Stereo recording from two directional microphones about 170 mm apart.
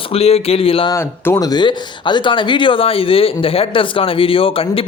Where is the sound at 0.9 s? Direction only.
20° left (ahead or behind).